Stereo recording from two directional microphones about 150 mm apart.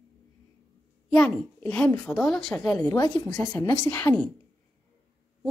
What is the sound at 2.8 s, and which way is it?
A woman's voice, 25° left (ahead or behind).